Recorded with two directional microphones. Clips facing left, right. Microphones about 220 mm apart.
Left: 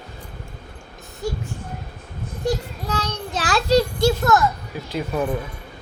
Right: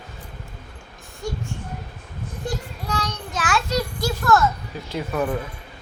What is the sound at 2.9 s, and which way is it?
Child singing, 35° left (ahead or behind).